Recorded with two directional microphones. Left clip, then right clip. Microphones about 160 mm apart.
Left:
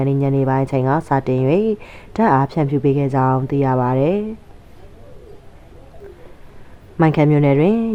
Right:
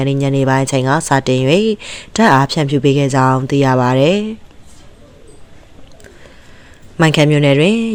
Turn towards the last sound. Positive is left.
turn(degrees=-15)  # may be behind; listen again after turning